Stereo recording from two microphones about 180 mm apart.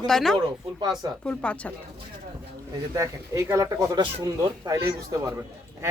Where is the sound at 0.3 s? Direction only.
20° right (ahead or behind).